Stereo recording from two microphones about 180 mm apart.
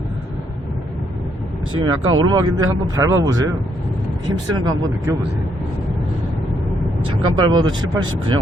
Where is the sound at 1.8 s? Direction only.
25° right (ahead or behind).